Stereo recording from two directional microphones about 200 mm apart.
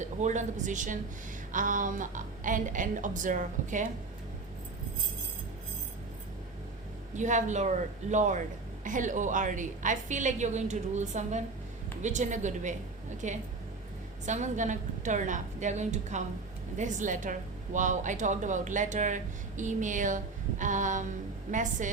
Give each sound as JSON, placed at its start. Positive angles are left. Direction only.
{"t": 0.0, "sound": "a woman's voice", "side_deg": -35}
{"t": 7.2, "sound": "a woman's voice", "side_deg": -35}